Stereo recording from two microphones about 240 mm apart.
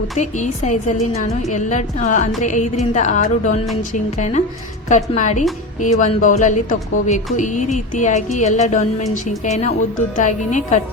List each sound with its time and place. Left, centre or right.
0.2 s a woman's voice: left